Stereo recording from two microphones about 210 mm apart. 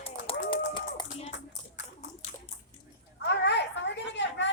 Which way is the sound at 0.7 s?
25° left (ahead or behind).